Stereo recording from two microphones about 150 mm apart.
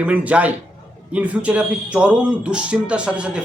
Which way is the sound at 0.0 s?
10° right (ahead or behind).